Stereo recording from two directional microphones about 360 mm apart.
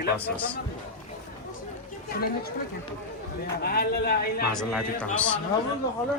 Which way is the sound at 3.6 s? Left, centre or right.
Left.